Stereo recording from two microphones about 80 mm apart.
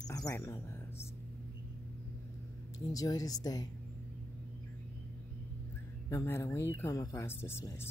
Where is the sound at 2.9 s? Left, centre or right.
Left.